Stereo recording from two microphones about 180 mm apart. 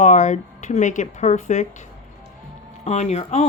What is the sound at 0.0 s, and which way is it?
Speech, 40° left (ahead or behind).